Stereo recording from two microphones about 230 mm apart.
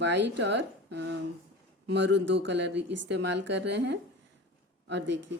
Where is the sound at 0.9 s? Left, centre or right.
Right.